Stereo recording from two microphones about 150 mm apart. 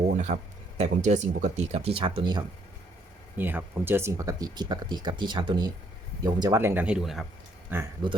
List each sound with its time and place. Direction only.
0.0 s a sound: 50° right (ahead or behind)
0.8 s speech: 50° right (ahead or behind); by 2.4 s 30° right (ahead or behind)
3.3 s speech: 15° right (ahead or behind)
7.7 s speech: 15° right (ahead or behind)